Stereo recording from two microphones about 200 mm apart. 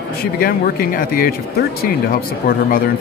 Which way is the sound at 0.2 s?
45° left (ahead or behind).